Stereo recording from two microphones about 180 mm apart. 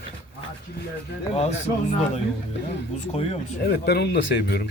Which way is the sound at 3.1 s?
35° left (ahead or behind).